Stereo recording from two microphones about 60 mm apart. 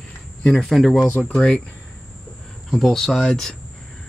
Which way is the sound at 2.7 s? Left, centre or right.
Centre.